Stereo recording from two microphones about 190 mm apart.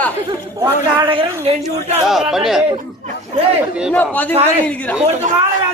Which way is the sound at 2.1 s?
Centre (ahead or behind).